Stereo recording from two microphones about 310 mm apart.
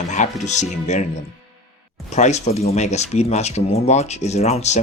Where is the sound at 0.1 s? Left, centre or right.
Left.